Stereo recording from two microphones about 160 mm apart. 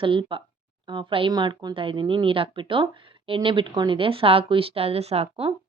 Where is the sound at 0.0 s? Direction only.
30° right (ahead or behind).